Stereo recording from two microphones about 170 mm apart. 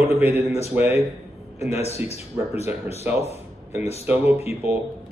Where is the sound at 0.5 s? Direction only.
40° left (ahead or behind).